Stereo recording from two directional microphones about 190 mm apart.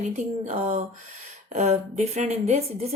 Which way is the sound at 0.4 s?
35° right (ahead or behind).